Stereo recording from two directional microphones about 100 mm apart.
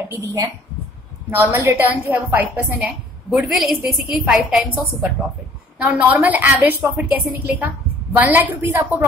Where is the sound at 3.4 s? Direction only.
Centre (ahead or behind).